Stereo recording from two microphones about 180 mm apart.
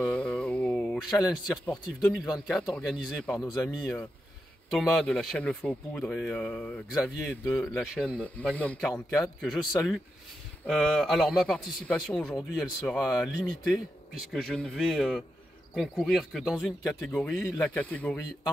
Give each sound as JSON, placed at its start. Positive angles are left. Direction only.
{"t": 0.0, "sound": "a sound", "side_deg": 5}
{"t": 1.5, "sound": "a man's voice", "side_deg": 5}
{"t": 2.2, "sound": "speech", "side_deg": 20}
{"t": 2.7, "sound": "a man's voice", "side_deg": 5}
{"t": 4.6, "sound": "a man's voice", "side_deg": 0}
{"t": 10.7, "sound": "a man's voice", "side_deg": 0}